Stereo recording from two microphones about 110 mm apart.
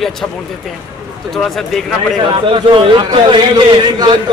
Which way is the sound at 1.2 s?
Centre (ahead or behind).